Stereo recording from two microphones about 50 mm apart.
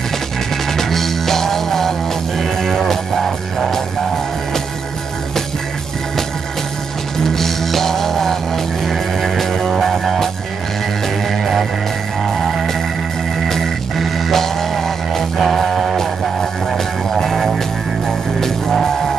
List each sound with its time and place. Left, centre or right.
0.7 s music: centre
7.2 s music: centre
12.3 s music: centre